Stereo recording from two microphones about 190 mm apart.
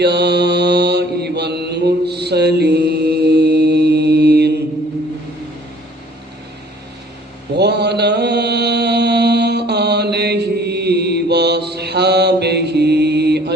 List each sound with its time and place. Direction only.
0.0 s mantra: 60° right (ahead or behind)
7.5 s mantra: 60° right (ahead or behind)